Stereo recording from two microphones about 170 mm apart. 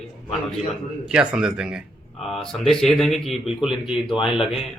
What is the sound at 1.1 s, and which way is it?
Speech, 5° right (ahead or behind).